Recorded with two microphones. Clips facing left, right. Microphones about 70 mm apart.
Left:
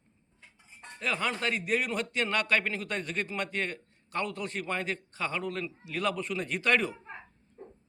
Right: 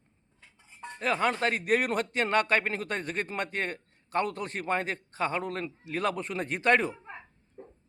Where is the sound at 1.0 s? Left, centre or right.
Right.